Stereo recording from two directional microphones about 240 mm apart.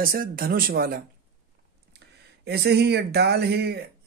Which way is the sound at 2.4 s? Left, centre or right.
Right.